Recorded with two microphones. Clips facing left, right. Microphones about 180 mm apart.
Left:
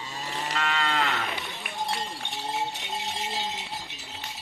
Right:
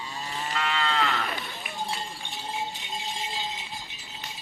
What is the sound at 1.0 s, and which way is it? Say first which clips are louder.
Livestock: right 1 dB; centre (ahead or behind).